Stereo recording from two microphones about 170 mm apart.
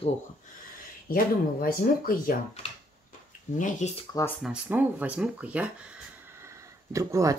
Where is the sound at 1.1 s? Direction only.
60° left (ahead or behind).